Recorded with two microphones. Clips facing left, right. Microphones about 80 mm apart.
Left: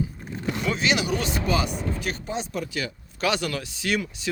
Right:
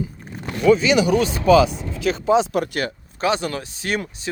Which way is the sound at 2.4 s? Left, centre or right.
Right.